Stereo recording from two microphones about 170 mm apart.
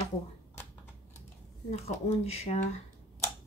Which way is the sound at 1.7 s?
40° left (ahead or behind).